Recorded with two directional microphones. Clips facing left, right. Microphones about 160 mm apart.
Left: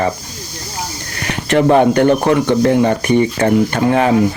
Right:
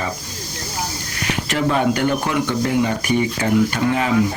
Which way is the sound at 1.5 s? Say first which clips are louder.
Left 9 dB; 60° left (ahead or behind).